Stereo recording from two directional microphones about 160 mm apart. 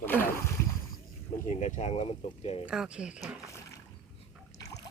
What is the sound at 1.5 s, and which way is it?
Speech, 45° left (ahead or behind).